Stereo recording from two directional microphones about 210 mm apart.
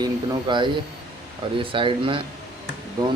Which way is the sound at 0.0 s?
20° right (ahead or behind).